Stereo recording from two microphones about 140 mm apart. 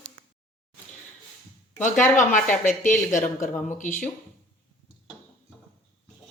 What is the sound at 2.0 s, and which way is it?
Speech, 65° left (ahead or behind).